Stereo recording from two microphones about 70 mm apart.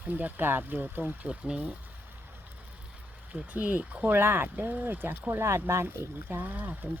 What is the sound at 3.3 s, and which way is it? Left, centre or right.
Speech, right.